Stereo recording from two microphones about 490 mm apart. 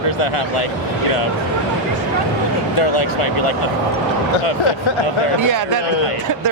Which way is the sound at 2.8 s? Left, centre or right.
Left.